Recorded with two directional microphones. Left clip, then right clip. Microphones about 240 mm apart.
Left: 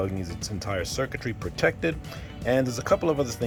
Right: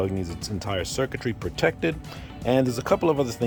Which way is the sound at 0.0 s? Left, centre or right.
Right.